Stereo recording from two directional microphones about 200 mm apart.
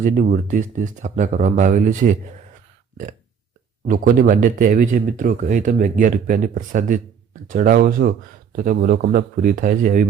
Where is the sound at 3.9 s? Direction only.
45° right (ahead or behind).